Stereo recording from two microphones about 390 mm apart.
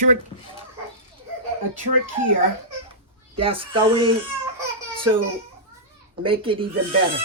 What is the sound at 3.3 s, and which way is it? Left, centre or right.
Speech, centre.